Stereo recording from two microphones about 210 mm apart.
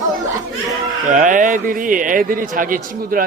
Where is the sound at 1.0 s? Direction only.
40° right (ahead or behind).